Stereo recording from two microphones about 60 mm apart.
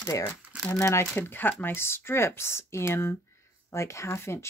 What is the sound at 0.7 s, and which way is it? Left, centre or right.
Speech, left.